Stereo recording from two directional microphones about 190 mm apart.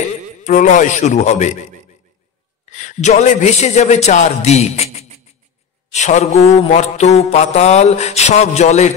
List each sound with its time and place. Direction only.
0.4 s mantra: 40° left (ahead or behind)
2.7 s mantra: 40° left (ahead or behind)